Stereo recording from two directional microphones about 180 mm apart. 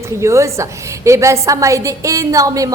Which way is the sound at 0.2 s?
15° right (ahead or behind).